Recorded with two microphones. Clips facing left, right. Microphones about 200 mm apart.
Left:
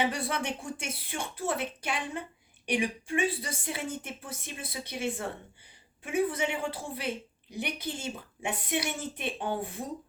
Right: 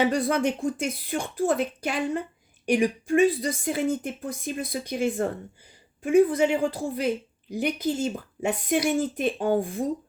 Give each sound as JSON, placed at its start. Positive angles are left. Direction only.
{"t": 0.0, "sound": "speech", "side_deg": -40}